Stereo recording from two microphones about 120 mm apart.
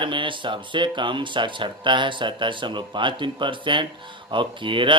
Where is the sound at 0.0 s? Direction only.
45° right (ahead or behind).